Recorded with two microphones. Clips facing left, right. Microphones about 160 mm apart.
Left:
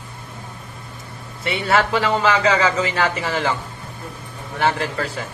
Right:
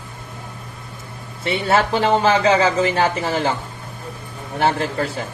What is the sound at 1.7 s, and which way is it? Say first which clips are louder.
Speech: right 2 dB; 30° right (ahead or behind).